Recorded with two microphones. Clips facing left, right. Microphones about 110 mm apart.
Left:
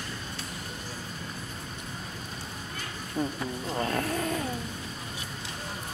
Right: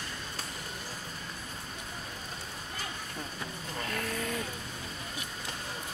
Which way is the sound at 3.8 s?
35° left (ahead or behind).